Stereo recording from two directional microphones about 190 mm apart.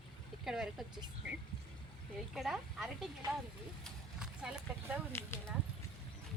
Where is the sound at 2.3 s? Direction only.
Centre (ahead or behind).